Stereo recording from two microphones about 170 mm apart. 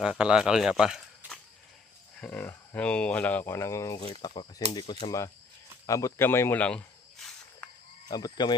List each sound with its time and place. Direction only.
0.0 s speech: 5° right (ahead or behind)
2.2 s speech: 10° left (ahead or behind)
5.8 s cricket: 20° left (ahead or behind)
8.0 s speech: 25° left (ahead or behind)